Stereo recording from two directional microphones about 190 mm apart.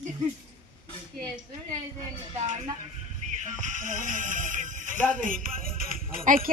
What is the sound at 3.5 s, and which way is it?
Speech, 40° right (ahead or behind).